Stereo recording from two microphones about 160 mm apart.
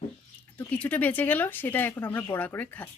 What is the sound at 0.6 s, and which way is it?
Speech, 10° left (ahead or behind).